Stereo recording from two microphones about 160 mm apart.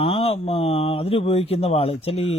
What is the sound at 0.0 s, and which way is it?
Speech, 35° left (ahead or behind).